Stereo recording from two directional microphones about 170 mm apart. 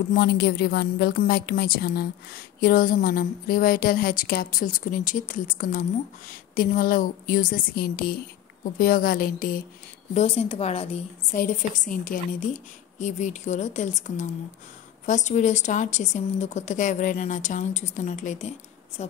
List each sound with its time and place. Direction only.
0.1 s a woman's voice: 65° left (ahead or behind)
10.1 s a woman's voice: 35° left (ahead or behind)
11.3 s a woman's voice: 50° left (ahead or behind)